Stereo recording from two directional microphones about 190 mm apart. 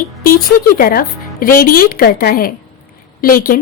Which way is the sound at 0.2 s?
50° left (ahead or behind).